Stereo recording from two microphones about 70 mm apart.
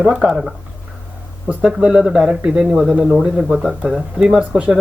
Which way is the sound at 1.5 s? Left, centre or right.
Centre.